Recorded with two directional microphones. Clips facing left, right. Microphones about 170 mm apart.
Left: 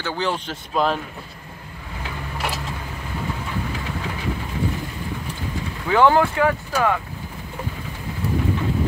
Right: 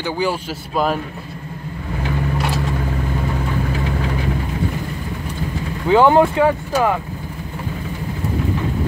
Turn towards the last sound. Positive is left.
turn(degrees=-20)  # may be behind; listen again after turning